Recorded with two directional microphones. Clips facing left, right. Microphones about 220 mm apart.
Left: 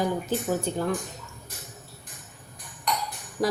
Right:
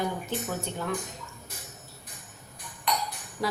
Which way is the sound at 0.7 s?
35° left (ahead or behind).